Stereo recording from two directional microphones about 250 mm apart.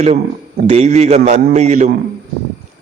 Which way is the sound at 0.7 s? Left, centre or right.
Right.